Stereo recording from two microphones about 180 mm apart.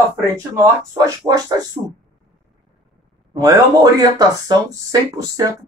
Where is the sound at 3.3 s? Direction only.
20° right (ahead or behind).